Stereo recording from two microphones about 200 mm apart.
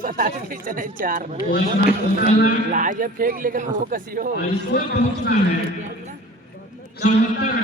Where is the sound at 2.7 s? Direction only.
40° right (ahead or behind).